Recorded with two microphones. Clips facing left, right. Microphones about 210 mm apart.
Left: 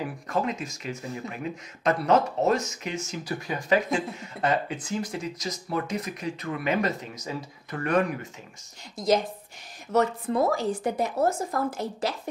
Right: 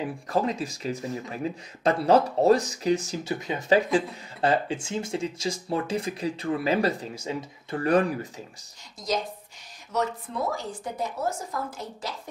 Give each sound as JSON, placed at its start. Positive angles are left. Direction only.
{"t": 0.3, "sound": "speech", "side_deg": -35}
{"t": 9.9, "sound": "speech", "side_deg": 55}